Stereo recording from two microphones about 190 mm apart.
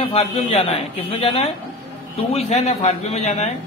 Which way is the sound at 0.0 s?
30° left (ahead or behind).